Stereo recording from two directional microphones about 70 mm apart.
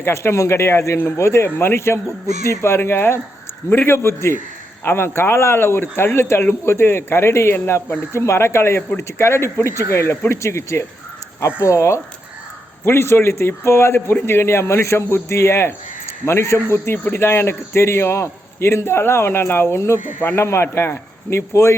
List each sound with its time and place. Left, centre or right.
0.0 s a man's voice: left